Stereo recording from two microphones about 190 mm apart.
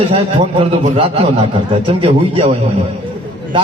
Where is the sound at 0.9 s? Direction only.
30° right (ahead or behind).